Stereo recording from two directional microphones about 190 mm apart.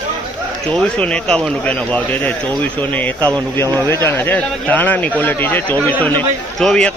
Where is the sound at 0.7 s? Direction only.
5° left (ahead or behind).